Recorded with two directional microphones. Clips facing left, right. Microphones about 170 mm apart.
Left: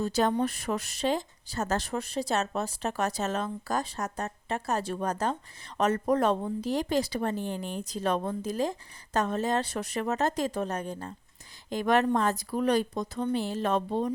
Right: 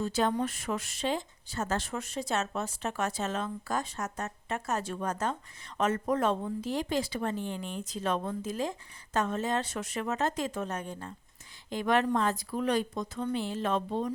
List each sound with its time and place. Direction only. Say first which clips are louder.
0.0 s speech: left 3 dB; 40° left (ahead or behind)